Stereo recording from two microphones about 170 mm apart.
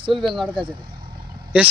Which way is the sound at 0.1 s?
Centre (ahead or behind).